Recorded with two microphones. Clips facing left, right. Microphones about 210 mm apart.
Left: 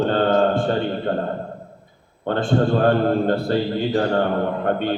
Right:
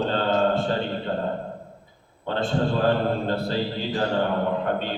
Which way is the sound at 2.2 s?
55° left (ahead or behind).